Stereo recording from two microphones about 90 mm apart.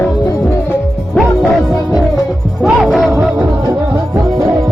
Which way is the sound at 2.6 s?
Centre (ahead or behind).